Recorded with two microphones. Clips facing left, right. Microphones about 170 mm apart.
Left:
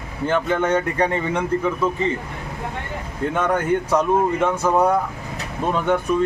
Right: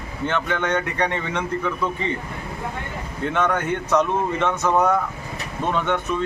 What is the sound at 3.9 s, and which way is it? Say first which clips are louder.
Speech: even; 10° left (ahead or behind).